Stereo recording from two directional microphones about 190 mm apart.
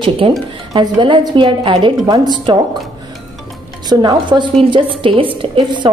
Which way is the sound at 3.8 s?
20° right (ahead or behind).